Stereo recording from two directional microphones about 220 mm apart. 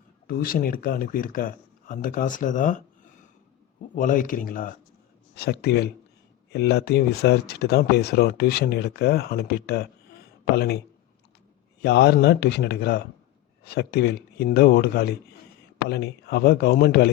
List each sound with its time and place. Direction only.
0.3 s speech: 40° left (ahead or behind)
3.9 s speech: 35° left (ahead or behind)
11.8 s speech: 50° left (ahead or behind)